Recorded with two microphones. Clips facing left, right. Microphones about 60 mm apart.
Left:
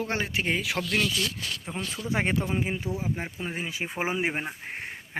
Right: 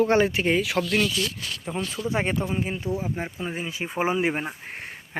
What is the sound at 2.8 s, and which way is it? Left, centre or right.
Speech, centre.